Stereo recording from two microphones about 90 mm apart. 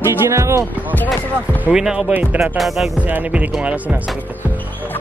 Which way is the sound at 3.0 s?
15° right (ahead or behind).